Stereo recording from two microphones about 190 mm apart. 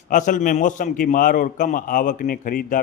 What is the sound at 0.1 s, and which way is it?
A man's voice, 45° left (ahead or behind).